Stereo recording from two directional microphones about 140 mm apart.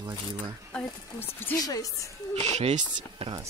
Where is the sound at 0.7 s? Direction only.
15° left (ahead or behind).